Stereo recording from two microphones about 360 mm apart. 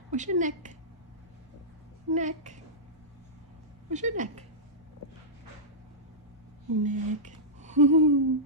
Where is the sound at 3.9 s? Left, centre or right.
Centre.